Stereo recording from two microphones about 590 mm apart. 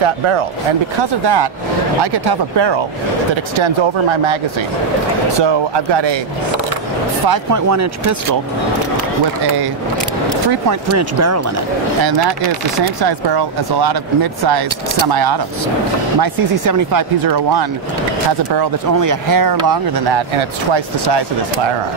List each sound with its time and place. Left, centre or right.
1.2 s speech: right
5.4 s speech: right
7.2 s speech: right
10.7 s speech: right
12.0 s speech: right